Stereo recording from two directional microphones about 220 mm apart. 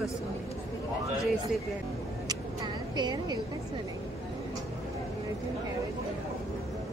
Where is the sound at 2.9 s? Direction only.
20° right (ahead or behind).